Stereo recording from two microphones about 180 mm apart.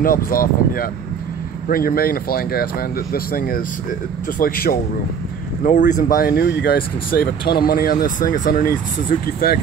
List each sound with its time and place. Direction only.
0.0 s speech: 55° left (ahead or behind)
5.6 s speech: 45° left (ahead or behind)